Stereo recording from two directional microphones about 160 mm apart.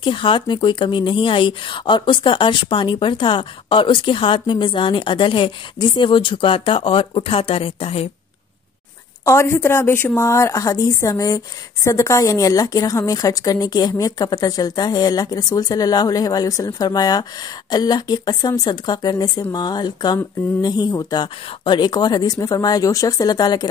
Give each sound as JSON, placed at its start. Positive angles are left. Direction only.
{"t": 0.0, "sound": "speech", "side_deg": 30}
{"t": 9.2, "sound": "a woman's voice", "side_deg": 15}